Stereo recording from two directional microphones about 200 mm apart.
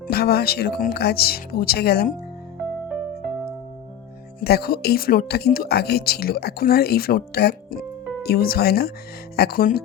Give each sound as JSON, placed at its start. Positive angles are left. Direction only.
{"t": 0.1, "sound": "speech", "side_deg": 50}
{"t": 4.4, "sound": "speech", "side_deg": 50}